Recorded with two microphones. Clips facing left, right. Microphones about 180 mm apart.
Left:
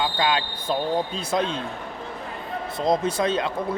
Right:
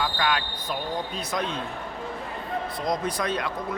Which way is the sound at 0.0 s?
25° left (ahead or behind).